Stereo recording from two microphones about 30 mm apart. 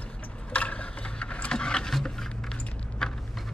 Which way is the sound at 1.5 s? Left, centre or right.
Left.